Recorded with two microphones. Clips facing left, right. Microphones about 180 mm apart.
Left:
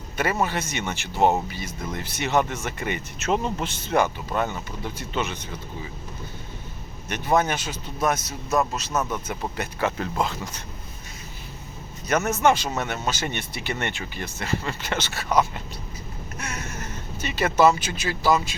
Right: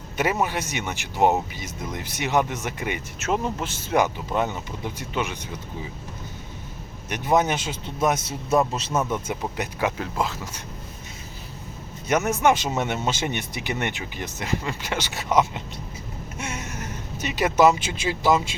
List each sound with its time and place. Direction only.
0.4 s speech: 10° right (ahead or behind)
7.1 s speech: 15° right (ahead or behind)
12.0 s speech: 15° right (ahead or behind)